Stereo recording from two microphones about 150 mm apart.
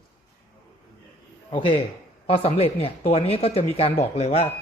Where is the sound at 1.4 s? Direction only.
35° left (ahead or behind).